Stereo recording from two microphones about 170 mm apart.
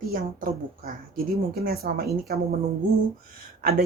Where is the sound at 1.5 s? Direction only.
60° right (ahead or behind).